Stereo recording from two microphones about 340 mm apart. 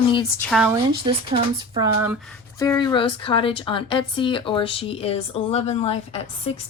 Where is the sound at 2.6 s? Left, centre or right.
Centre.